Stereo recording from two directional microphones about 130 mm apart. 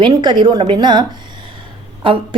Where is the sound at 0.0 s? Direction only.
35° right (ahead or behind).